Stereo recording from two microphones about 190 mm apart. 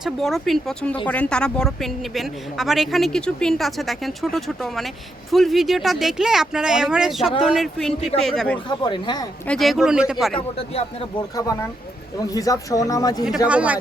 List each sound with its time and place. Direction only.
0.0 s a woman's voice: centre (ahead or behind)
8.8 s speech: 25° left (ahead or behind)
9.5 s a woman's voice: centre (ahead or behind)
11.3 s speech: 15° left (ahead or behind)
13.5 s speech: 5° right (ahead or behind)